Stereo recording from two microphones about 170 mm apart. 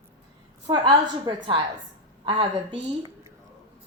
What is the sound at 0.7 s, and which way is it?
A woman's voice, 30° right (ahead or behind).